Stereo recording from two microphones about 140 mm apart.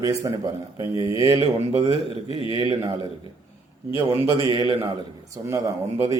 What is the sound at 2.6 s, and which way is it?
Speech, 30° right (ahead or behind).